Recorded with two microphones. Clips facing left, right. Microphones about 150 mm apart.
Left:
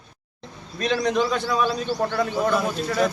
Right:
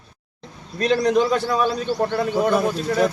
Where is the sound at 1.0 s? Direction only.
Centre (ahead or behind).